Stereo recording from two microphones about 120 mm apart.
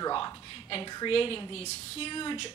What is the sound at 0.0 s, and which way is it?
A woman's voice, 40° left (ahead or behind).